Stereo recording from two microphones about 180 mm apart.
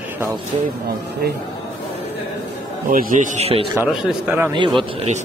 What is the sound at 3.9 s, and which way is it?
Speech, 5° right (ahead or behind).